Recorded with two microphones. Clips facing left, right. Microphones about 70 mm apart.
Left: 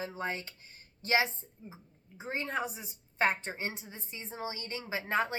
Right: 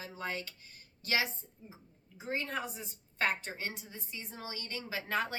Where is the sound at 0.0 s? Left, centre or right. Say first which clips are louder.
Left 3 dB; left.